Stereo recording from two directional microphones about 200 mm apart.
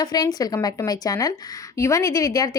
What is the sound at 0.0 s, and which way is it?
A woman's voice, 20° left (ahead or behind).